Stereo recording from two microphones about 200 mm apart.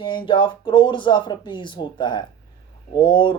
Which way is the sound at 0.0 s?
25° left (ahead or behind).